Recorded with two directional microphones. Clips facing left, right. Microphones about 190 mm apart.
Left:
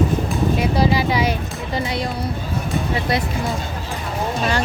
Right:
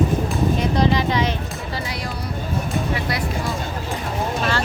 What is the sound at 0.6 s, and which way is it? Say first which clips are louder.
Speech: left 1 dB; 5° left (ahead or behind).